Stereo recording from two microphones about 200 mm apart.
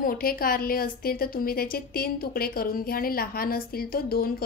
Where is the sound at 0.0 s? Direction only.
45° left (ahead or behind).